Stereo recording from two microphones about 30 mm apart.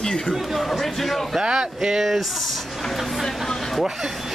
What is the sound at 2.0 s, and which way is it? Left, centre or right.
Speech, centre.